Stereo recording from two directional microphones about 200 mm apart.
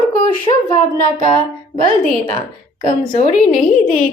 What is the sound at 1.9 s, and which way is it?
A woman's voice, 40° left (ahead or behind).